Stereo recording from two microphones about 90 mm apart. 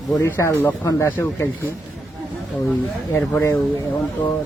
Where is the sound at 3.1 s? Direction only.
20° left (ahead or behind).